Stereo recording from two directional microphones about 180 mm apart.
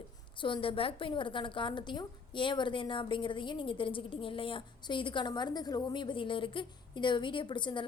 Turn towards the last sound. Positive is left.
turn(degrees=25)  # may be behind; listen again after turning